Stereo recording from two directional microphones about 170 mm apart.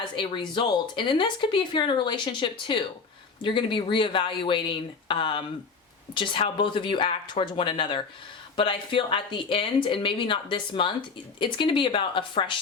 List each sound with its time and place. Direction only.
0.0 s speech: 30° left (ahead or behind)